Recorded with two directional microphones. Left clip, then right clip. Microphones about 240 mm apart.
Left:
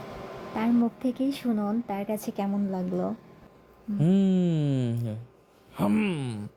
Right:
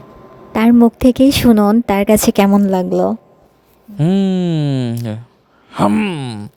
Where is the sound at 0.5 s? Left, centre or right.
Right.